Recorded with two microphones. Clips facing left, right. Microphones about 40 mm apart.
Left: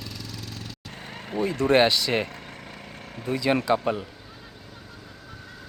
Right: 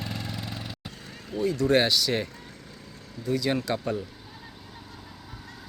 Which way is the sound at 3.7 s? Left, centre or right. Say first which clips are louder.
Left 5 dB; left.